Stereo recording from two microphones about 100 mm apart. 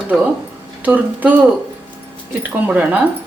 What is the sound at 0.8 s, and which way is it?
Speech, 15° right (ahead or behind).